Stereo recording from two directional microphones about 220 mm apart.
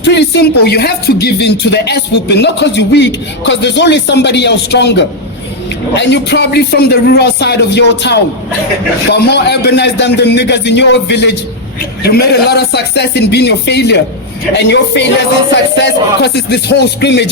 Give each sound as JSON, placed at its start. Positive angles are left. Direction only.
{"t": 0.0, "sound": "speech", "side_deg": 50}